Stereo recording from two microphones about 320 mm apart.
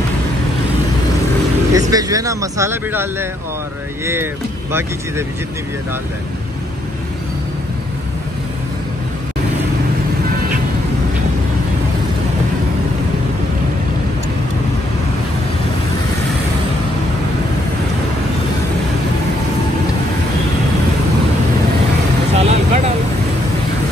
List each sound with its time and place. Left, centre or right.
1.7 s speech: centre
22.3 s vehicle: centre